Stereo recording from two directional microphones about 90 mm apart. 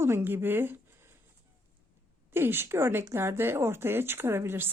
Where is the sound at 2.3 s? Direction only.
25° right (ahead or behind).